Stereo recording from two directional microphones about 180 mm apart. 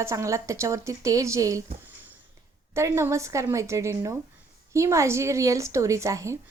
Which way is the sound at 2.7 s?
15° right (ahead or behind).